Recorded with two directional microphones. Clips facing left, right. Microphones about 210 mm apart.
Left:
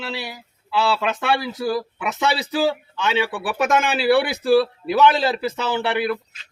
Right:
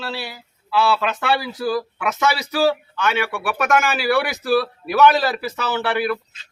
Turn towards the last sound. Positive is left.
turn(degrees=20)  # may be behind; listen again after turning